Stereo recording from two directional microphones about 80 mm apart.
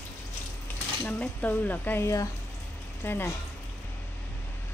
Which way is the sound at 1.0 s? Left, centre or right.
Left.